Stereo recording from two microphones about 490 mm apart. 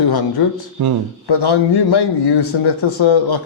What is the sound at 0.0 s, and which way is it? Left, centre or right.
Speech, left.